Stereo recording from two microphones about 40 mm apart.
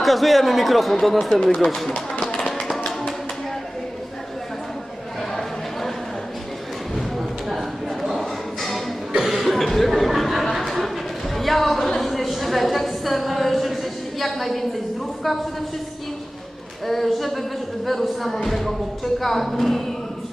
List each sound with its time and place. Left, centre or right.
0.0 s speech: centre
1.5 s speech: left
2.2 s tap: centre
7.2 s a sound: centre
9.1 s cough: centre
10.5 s a sound: centre
16.8 s speech: centre